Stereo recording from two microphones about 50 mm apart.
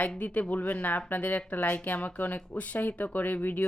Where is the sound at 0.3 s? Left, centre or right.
Left.